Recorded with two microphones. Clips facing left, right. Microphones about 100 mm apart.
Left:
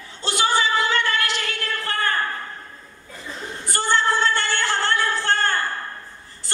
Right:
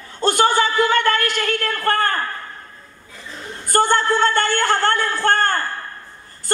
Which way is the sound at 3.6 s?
50° right (ahead or behind).